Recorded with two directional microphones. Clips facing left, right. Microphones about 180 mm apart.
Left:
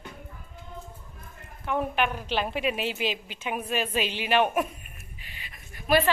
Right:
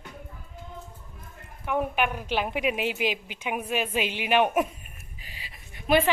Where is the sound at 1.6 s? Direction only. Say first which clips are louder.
Right 1 dB; 10° right (ahead or behind).